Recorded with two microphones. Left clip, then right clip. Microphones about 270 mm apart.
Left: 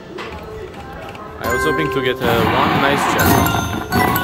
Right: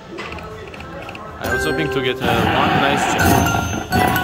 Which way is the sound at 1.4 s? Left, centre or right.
Centre.